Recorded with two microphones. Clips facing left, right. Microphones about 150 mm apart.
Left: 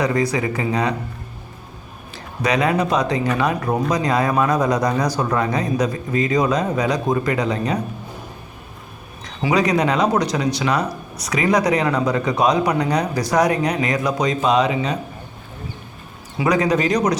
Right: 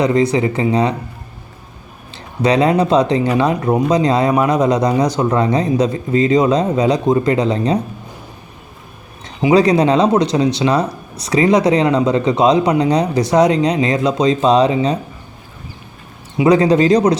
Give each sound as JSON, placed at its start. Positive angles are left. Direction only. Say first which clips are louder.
{"t": 0.0, "sound": "speech", "louder": "right 6 dB", "side_deg": -25}
{"t": 2.1, "sound": "speech", "louder": "right 6 dB", "side_deg": -30}
{"t": 9.2, "sound": "speech", "louder": "right 7 dB", "side_deg": -25}
{"t": 16.4, "sound": "speech", "louder": "right 7 dB", "side_deg": -25}